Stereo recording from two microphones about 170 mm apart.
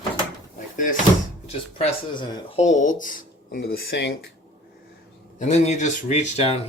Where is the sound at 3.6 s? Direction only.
80° left.